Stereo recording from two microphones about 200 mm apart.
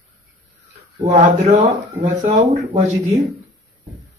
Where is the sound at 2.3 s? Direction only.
25° right (ahead or behind).